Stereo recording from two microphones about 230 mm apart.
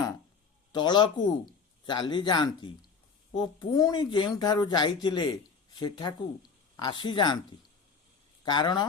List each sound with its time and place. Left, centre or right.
0.7 s speech: centre
8.4 s speech: centre